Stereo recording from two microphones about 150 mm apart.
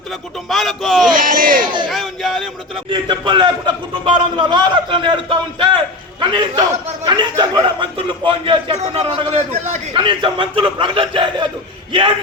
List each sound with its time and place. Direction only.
0.4 s speech: centre (ahead or behind)
1.1 s a sound: 65° right (ahead or behind)
1.9 s a sound: centre (ahead or behind)
2.9 s a man's voice: 30° right (ahead or behind)
8.8 s a man's voice: 45° right (ahead or behind)
9.9 s a man's voice: 35° right (ahead or behind)